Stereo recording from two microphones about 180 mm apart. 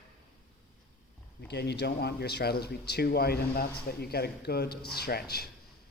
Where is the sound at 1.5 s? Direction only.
65° left (ahead or behind).